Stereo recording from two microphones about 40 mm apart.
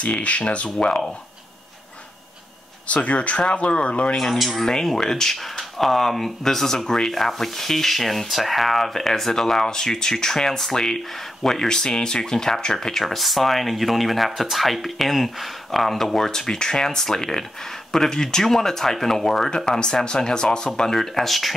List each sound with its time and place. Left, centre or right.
0.0 s speech: left
2.9 s speech: left
4.2 s speech: centre
16.3 s speech: centre